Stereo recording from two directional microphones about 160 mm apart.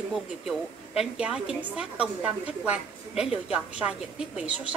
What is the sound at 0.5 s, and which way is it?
A woman's voice, 5° right (ahead or behind).